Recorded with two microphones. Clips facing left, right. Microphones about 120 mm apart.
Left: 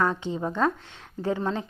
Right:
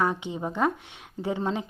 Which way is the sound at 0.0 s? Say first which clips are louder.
Left 1 dB; 15° right (ahead or behind).